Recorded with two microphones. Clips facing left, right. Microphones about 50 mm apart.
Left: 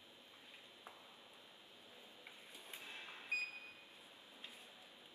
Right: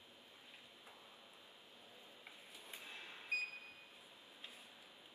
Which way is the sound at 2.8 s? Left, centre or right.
Left.